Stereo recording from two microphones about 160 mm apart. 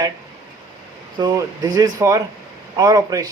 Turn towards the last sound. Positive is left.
turn(degrees=-25)  # may be behind; listen again after turning